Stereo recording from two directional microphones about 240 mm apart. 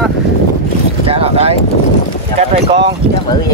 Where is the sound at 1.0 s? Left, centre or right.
Right.